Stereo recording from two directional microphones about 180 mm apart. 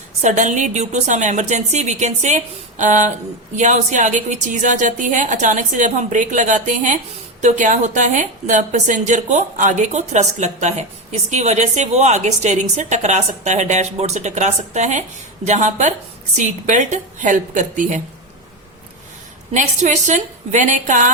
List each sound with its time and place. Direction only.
0.2 s a woman's voice: 40° right (ahead or behind)
19.5 s a woman's voice: 40° right (ahead or behind)